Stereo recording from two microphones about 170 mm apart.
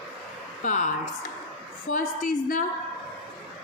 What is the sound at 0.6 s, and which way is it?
Speech, 45° left (ahead or behind).